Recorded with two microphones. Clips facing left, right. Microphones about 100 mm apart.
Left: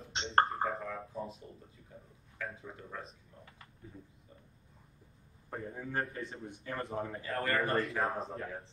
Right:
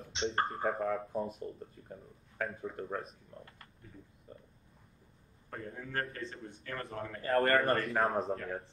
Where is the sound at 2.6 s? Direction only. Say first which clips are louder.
Right 7 dB; 50° right (ahead or behind).